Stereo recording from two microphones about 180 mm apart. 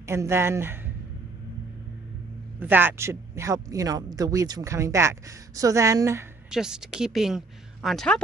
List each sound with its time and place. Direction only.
0.0 s speech: 15° right (ahead or behind)
2.6 s speech: 10° right (ahead or behind)
6.5 s a woman's voice: 5° right (ahead or behind)